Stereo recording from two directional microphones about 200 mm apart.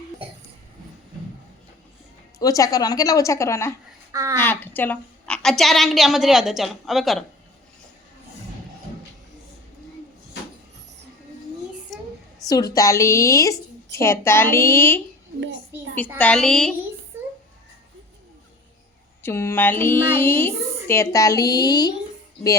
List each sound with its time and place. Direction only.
2.4 s speech: 15° left (ahead or behind)
4.1 s speech: 15° right (ahead or behind)
4.4 s a woman's voice: 10° left (ahead or behind)
12.5 s speech: 20° left (ahead or behind)
16.1 s a woman's voice: 5° left (ahead or behind)
17.1 s a sound: 10° right (ahead or behind)
19.2 s speech: 10° left (ahead or behind)